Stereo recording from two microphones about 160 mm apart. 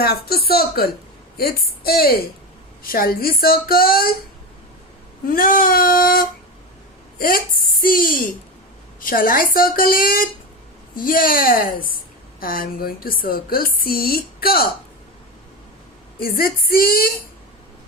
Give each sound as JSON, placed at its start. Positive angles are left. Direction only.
{"t": 0.0, "sound": "a woman's voice", "side_deg": 70}
{"t": 5.2, "sound": "a woman's voice", "side_deg": 65}
{"t": 16.2, "sound": "a woman's voice", "side_deg": 65}